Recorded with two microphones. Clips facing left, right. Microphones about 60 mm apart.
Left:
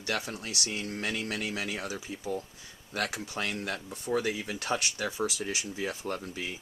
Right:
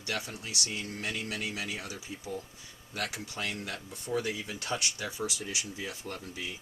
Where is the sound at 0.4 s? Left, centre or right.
Left.